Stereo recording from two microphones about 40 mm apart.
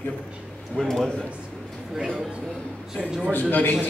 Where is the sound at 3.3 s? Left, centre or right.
Left.